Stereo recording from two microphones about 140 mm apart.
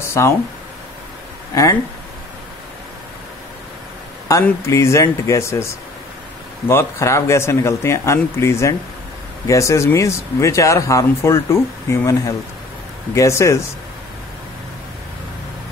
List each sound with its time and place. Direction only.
0.1 s speech: 15° left (ahead or behind)
1.5 s speech: 25° left (ahead or behind)
4.3 s speech: 20° left (ahead or behind)
6.7 s speech: 20° left (ahead or behind)